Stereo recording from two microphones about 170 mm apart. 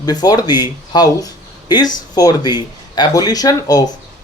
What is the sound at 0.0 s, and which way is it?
Speech, 25° left (ahead or behind).